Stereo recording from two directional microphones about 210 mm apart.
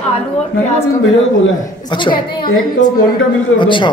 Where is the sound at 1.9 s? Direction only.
25° left (ahead or behind).